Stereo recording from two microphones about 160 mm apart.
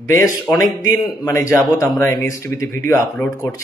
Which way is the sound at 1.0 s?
20° left (ahead or behind).